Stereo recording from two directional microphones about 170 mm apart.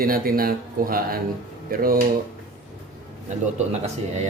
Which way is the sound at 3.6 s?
40° right (ahead or behind).